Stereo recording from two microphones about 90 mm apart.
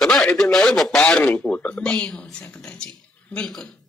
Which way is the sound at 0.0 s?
5° left (ahead or behind).